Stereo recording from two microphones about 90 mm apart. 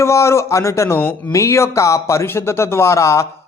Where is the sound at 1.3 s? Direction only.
35° left (ahead or behind).